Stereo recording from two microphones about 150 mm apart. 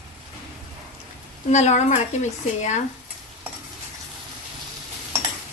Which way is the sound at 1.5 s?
50° left (ahead or behind).